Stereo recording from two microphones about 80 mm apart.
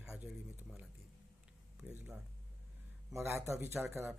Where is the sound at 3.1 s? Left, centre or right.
Right.